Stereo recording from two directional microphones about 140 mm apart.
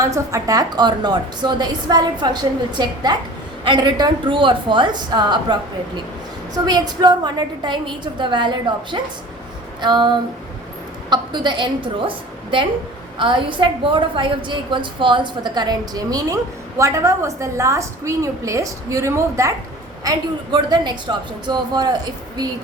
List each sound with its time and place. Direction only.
0.0 s a woman's voice: 20° right (ahead or behind)